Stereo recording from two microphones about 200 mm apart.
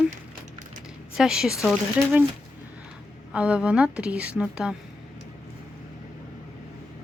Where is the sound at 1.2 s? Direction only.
5° right (ahead or behind).